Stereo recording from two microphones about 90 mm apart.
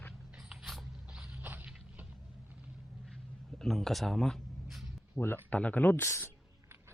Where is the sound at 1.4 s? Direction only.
20° right (ahead or behind).